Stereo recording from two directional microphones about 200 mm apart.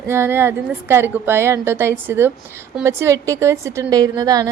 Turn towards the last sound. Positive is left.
turn(degrees=-20)  # may be behind; listen again after turning